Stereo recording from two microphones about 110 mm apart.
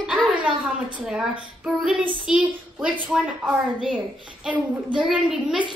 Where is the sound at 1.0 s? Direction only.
10° right (ahead or behind).